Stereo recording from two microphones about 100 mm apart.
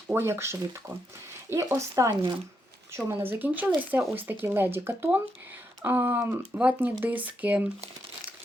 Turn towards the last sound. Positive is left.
turn(degrees=-15)  # may be behind; listen again after turning